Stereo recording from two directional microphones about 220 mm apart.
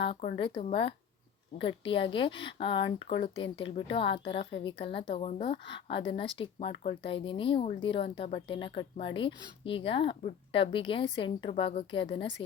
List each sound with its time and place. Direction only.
0.0 s a woman's voice: 30° left (ahead or behind)